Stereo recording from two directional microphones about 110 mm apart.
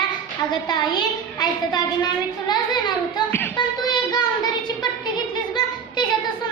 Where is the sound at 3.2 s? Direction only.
15° left (ahead or behind).